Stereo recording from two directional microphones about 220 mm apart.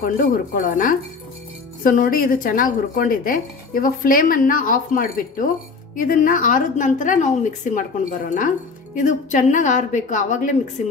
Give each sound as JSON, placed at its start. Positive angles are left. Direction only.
{"t": 0.0, "sound": "a woman's voice", "side_deg": 40}